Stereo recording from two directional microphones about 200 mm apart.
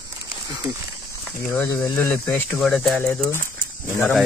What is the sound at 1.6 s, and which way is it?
Speech, 10° left (ahead or behind).